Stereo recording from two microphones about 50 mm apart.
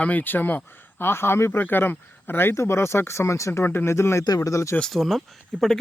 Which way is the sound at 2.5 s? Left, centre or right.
Left.